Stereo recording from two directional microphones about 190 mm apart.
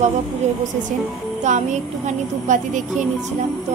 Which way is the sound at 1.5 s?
40° right (ahead or behind).